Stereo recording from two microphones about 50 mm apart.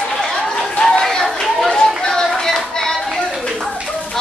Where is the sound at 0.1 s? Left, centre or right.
Centre.